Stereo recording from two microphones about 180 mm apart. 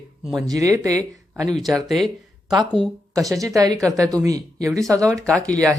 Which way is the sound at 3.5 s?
20° right (ahead or behind).